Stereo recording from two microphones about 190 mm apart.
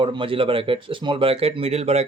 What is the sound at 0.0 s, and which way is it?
Speech, 25° right (ahead or behind).